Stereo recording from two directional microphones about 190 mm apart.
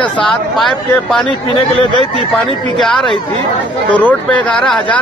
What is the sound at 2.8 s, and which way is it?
Speech, centre (ahead or behind).